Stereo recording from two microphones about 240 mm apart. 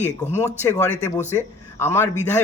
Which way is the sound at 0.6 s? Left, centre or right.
Centre.